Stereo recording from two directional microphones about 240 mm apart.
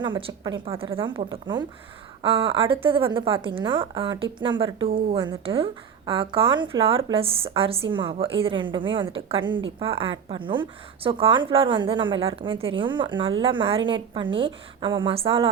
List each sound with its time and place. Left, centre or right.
0.0 s a woman's voice: right